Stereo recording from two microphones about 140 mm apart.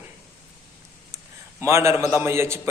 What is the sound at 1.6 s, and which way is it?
A man's voice, 20° right (ahead or behind).